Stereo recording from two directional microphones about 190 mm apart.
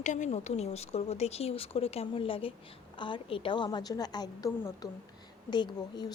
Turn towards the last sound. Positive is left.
turn(degrees=20)  # may be behind; listen again after turning